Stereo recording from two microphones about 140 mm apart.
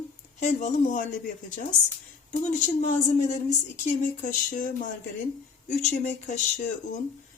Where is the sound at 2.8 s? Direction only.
65° left (ahead or behind).